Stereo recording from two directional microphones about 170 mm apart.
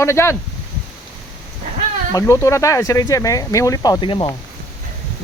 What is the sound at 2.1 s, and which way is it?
Speech, 15° left (ahead or behind).